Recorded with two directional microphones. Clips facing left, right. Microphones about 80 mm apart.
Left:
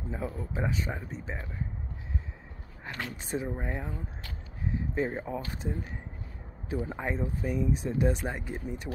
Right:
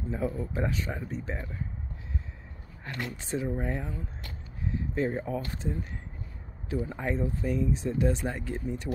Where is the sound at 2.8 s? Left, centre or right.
Centre.